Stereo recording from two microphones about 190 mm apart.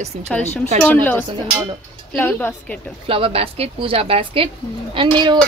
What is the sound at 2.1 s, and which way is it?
Speech, 10° left (ahead or behind).